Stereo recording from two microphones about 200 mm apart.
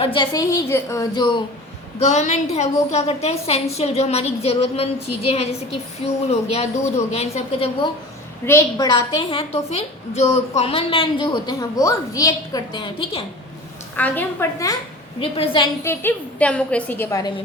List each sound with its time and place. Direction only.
0.0 s a woman's voice: 25° left (ahead or behind)
2.0 s a woman's voice: 35° left (ahead or behind)
8.4 s a woman's voice: 15° left (ahead or behind)
13.9 s a woman's voice: 10° left (ahead or behind)
15.2 s a woman's voice: 25° left (ahead or behind)
15.9 s a woman's voice: 10° left (ahead or behind)